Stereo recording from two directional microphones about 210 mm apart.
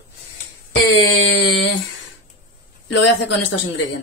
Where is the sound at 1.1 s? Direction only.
60° left (ahead or behind).